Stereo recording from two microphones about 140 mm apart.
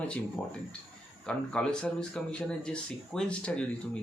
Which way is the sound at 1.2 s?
5° left (ahead or behind).